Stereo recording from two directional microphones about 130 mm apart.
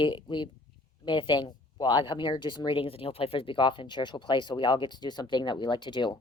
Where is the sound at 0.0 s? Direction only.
40° left (ahead or behind).